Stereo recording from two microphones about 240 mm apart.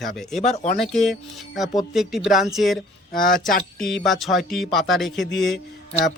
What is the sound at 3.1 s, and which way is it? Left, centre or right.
Speech, left.